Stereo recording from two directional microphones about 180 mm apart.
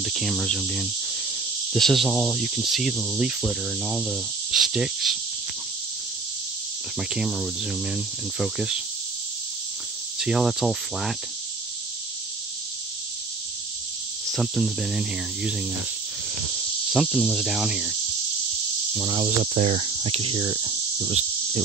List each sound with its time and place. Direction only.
0.0 s cricket: centre (ahead or behind)
7.0 s cricket: 5° right (ahead or behind)
10.1 s cricket: centre (ahead or behind)
14.3 s cricket: centre (ahead or behind)
16.9 s cricket: centre (ahead or behind)
19.4 s cricket: 40° right (ahead or behind)